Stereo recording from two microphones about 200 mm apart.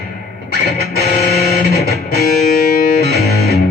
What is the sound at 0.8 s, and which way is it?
Music, 50° left (ahead or behind).